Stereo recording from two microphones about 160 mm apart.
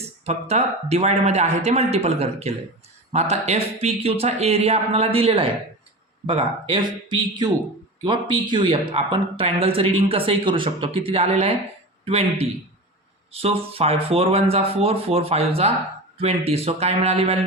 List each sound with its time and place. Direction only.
0.3 s a man's voice: 40° right (ahead or behind)